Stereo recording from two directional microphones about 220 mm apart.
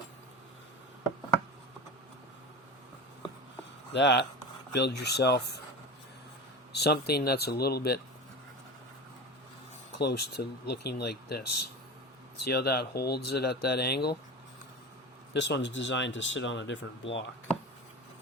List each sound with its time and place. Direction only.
3.9 s speech: 50° left (ahead or behind)
6.7 s speech: 45° left (ahead or behind)
10.0 s speech: 45° left (ahead or behind)
15.3 s speech: 50° left (ahead or behind)